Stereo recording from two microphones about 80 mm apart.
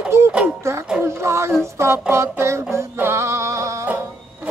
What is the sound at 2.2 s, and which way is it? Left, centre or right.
Music, right.